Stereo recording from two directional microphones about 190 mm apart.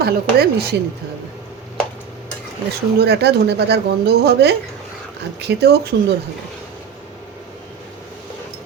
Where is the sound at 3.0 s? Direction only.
60° right (ahead or behind).